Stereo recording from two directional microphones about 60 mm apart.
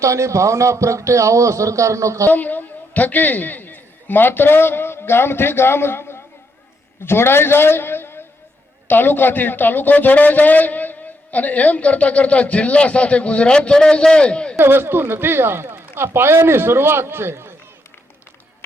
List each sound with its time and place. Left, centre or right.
0.0 s speech: right
2.3 s a man's voice: left
14.6 s speech: right